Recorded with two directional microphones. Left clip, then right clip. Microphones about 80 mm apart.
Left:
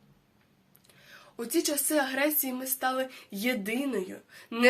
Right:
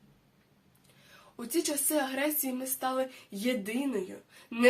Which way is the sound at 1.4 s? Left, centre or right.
Right.